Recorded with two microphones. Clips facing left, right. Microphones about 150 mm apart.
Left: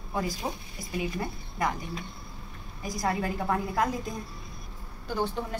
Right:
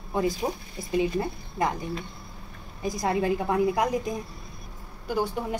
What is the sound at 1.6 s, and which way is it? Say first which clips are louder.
Speech: right 3 dB; 20° right (ahead or behind).